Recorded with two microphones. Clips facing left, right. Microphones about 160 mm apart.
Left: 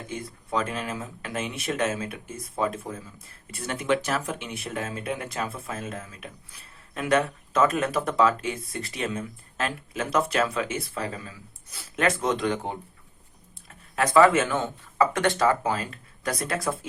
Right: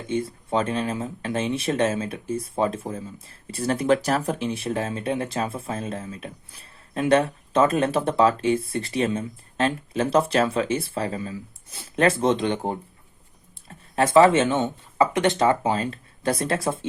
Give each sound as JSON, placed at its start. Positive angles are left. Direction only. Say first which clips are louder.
{"t": 0.1, "sound": "speech", "louder": "right 6 dB", "side_deg": -30}
{"t": 13.7, "sound": "speech", "louder": "right 4 dB", "side_deg": -30}